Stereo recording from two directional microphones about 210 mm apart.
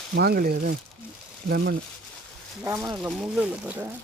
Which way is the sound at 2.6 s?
15° right (ahead or behind).